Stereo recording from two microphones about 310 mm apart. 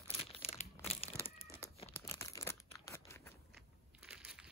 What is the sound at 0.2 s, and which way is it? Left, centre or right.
Crumpling, centre.